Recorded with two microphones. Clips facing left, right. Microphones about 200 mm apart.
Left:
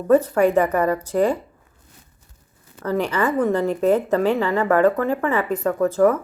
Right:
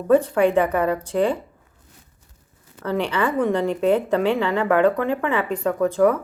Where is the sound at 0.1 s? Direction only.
5° left (ahead or behind).